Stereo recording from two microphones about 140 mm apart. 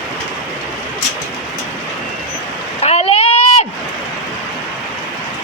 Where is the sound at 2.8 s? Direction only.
45° left (ahead or behind).